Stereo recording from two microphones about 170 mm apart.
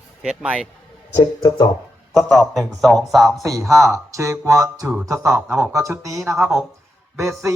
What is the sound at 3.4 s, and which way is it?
Speech, 20° right (ahead or behind).